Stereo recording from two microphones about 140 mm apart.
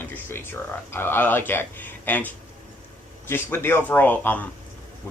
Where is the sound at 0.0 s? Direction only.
15° left (ahead or behind).